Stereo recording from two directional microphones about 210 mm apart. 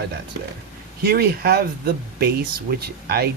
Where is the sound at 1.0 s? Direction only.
45° right (ahead or behind).